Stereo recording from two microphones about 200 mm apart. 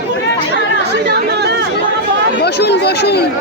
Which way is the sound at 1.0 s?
55° right (ahead or behind).